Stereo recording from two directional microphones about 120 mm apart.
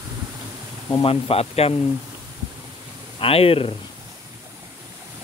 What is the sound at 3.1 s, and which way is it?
Speech, 50° left (ahead or behind).